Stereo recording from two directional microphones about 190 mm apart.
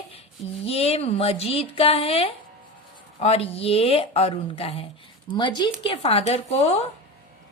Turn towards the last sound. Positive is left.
turn(degrees=30)  # may be behind; listen again after turning